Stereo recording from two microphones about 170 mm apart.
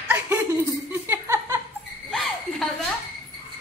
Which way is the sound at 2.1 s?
Centre (ahead or behind).